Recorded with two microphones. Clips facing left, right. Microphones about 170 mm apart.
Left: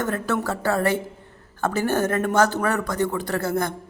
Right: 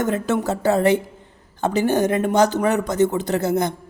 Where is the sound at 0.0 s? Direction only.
20° right (ahead or behind).